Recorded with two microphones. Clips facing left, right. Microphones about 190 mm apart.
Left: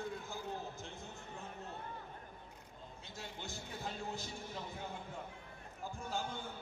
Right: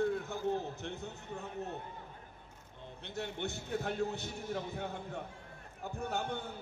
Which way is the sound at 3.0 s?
65° right (ahead or behind).